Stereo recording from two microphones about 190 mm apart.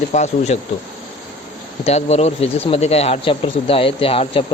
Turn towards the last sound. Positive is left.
turn(degrees=30)  # may be behind; listen again after turning